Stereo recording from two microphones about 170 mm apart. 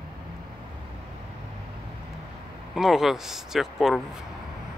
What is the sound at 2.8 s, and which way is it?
Speech, centre (ahead or behind).